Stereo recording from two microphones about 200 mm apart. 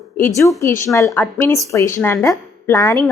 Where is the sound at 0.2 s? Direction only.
15° left (ahead or behind).